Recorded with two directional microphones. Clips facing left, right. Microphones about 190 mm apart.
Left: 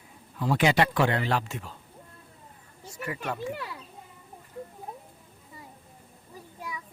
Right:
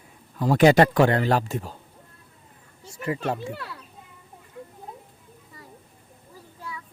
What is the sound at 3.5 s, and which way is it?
Speech, 15° left (ahead or behind).